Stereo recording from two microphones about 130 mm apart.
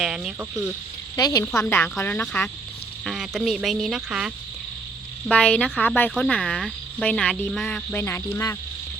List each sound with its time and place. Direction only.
0.0 s cricket: 5° right (ahead or behind)
1.1 s cricket: 30° left (ahead or behind); by 2.5 s 10° left (ahead or behind)
3.0 s cricket: centre (ahead or behind)
5.3 s cricket: 10° left (ahead or behind)